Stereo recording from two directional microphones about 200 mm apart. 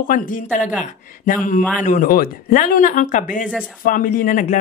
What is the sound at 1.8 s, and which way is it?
Speech, 40° left (ahead or behind).